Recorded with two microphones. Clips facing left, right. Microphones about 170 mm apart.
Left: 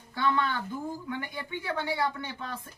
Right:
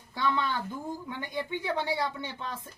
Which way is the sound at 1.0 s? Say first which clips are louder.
Right 1 dB; 25° right (ahead or behind).